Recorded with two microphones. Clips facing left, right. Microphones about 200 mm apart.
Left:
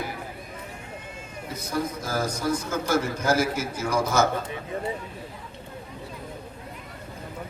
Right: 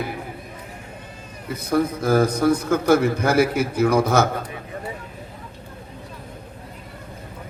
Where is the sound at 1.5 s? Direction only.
60° right (ahead or behind).